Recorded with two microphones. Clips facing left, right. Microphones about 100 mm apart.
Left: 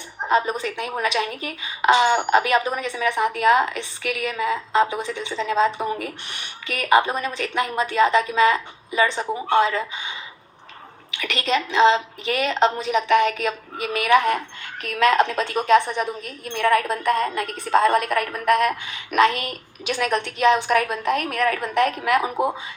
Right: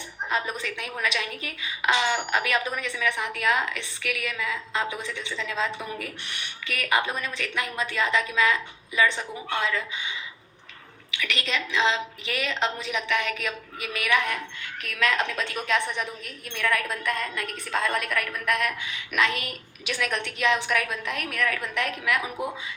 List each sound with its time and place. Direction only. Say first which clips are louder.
0.2 s a woman's voice: left 8 dB; 35° left (ahead or behind)